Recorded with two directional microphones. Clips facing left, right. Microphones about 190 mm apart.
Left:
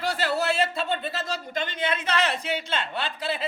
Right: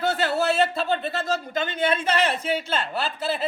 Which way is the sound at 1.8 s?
30° right (ahead or behind).